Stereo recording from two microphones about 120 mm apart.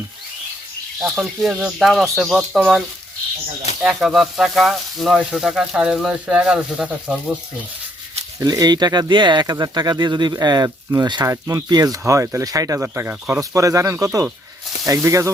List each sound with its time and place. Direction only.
0.9 s speech: centre (ahead or behind)
3.8 s speech: 5° right (ahead or behind)
8.4 s speech: 30° right (ahead or behind)